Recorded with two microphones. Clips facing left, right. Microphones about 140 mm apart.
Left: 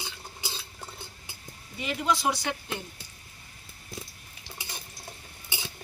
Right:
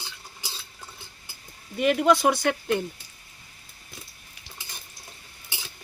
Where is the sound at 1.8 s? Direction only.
60° right (ahead or behind).